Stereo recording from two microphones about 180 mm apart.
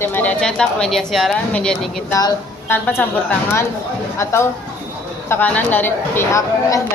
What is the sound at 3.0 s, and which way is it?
A woman's voice, 10° left (ahead or behind).